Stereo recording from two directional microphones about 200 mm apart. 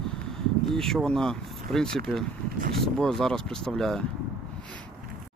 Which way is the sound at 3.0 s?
5° left (ahead or behind).